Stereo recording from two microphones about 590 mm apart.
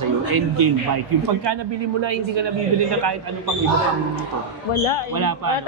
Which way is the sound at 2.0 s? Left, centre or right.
Right.